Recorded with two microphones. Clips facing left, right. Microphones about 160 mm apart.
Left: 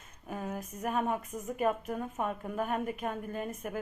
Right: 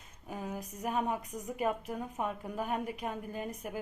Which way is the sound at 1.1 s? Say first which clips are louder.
Left 2 dB; 15° right (ahead or behind).